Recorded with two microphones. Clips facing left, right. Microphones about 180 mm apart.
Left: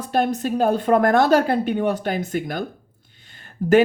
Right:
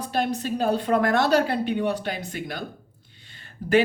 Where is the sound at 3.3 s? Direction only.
45° left (ahead or behind).